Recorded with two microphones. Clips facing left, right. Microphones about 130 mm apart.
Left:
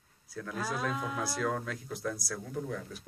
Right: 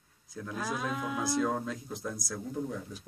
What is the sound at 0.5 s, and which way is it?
Speech, centre (ahead or behind).